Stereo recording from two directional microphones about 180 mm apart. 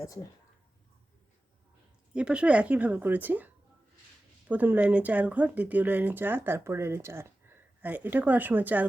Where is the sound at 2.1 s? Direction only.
5° right (ahead or behind).